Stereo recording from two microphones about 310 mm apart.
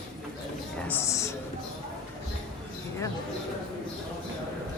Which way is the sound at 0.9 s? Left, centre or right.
Centre.